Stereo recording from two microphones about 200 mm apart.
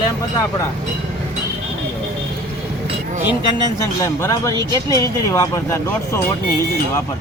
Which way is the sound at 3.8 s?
15° left (ahead or behind).